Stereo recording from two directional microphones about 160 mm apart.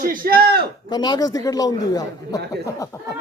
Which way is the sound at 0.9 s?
25° left (ahead or behind).